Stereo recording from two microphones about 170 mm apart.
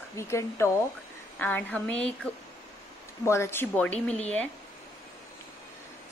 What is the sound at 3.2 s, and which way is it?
A woman's voice, 15° left (ahead or behind).